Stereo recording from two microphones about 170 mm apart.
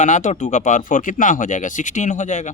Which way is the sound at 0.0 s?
45° left (ahead or behind).